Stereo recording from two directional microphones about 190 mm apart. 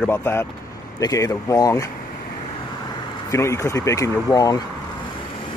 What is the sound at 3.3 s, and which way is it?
Speech, 15° left (ahead or behind).